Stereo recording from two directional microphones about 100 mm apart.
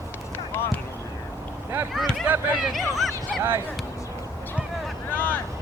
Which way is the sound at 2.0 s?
Centre (ahead or behind).